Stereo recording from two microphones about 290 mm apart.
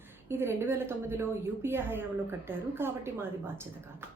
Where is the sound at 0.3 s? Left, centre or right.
Centre.